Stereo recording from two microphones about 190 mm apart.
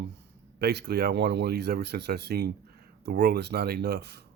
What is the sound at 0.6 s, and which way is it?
Speech, 60° right (ahead or behind).